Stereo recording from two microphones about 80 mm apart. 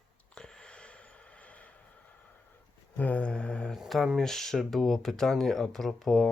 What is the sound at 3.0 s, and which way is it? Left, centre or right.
Mantra, centre.